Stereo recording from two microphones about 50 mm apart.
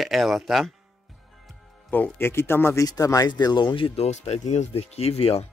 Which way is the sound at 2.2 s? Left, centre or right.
Left.